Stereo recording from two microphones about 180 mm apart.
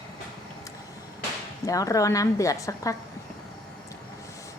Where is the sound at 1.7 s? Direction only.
20° left (ahead or behind).